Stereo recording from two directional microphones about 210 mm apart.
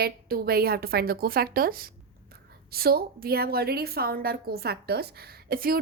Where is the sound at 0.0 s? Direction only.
45° right (ahead or behind).